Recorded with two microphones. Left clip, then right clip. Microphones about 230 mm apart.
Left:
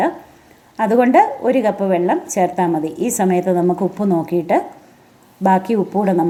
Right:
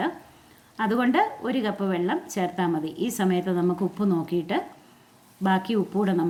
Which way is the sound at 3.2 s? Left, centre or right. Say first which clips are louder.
Left 9 dB; right.